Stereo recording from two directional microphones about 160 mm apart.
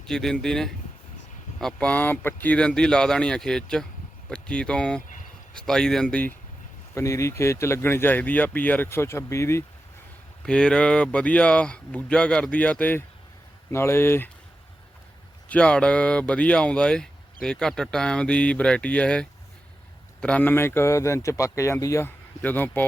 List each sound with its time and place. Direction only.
0.0 s speech: 5° left (ahead or behind)
6.9 s speech: 20° left (ahead or behind)
10.4 s speech: 5° left (ahead or behind)
15.4 s speech: 5° left (ahead or behind)